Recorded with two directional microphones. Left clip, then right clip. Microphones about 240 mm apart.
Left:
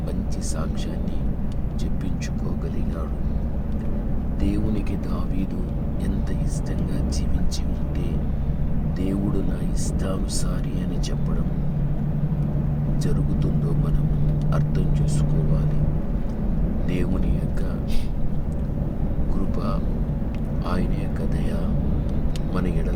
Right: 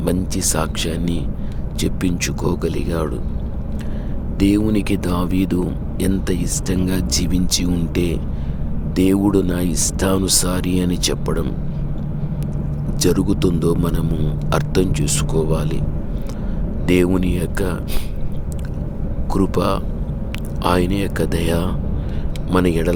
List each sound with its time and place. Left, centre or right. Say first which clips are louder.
0.0 s speech: right 11 dB; right
4.4 s speech: right 11 dB; right
13.0 s speech: right 14 dB; right
16.8 s speech: right 14 dB; right
19.3 s speech: right 13 dB; right